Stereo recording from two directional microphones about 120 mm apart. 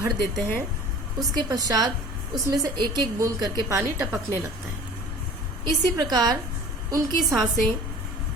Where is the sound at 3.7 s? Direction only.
20° right (ahead or behind).